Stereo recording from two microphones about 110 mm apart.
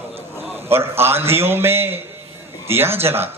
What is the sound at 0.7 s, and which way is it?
A man's voice, 20° right (ahead or behind).